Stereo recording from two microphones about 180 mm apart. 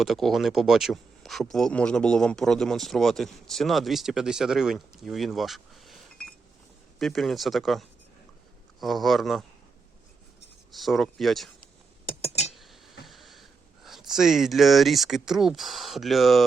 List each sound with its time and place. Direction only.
0.0 s speech: centre (ahead or behind)
10.7 s speech: centre (ahead or behind)
12.0 s a sound: 35° left (ahead or behind)
12.5 s whispering: centre (ahead or behind)
14.1 s speech: 5° right (ahead or behind)